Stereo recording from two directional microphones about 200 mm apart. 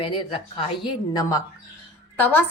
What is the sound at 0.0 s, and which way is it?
A woman's voice, 25° left (ahead or behind).